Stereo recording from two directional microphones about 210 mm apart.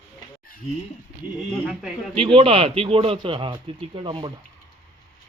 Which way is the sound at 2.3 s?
25° right (ahead or behind).